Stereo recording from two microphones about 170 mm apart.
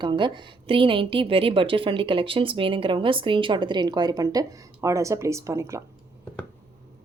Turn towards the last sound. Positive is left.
turn(degrees=-15)  # may be behind; listen again after turning